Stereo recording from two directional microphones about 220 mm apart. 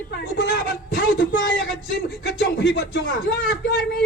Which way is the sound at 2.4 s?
50° left (ahead or behind).